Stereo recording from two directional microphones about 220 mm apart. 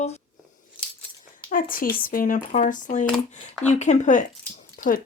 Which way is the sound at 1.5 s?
40° left (ahead or behind).